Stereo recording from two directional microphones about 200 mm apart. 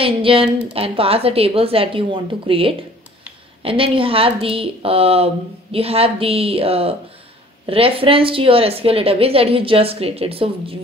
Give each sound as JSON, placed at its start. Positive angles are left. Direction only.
{"t": 0.0, "sound": "speech", "side_deg": -25}